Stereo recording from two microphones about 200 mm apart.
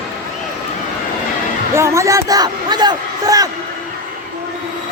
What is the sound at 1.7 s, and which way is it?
A man's voice, 15° right (ahead or behind).